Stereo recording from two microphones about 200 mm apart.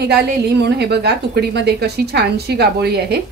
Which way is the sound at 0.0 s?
55° right (ahead or behind).